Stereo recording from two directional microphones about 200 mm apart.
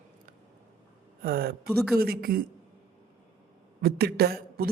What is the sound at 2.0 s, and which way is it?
Speech, 50° right (ahead or behind).